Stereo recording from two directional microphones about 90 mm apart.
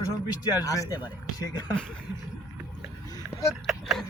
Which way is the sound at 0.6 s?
40° left (ahead or behind).